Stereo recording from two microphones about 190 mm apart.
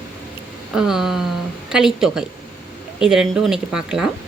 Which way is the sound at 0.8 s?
Centre (ahead or behind).